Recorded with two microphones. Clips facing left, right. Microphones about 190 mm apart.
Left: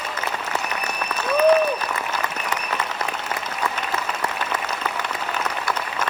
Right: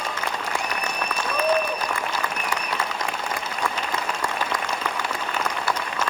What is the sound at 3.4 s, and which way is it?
Applause, 10° right (ahead or behind).